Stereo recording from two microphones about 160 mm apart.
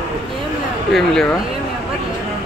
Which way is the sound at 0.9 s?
5° left (ahead or behind).